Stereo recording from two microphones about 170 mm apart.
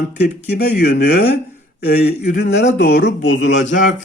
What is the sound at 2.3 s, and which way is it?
Speech, 90° left.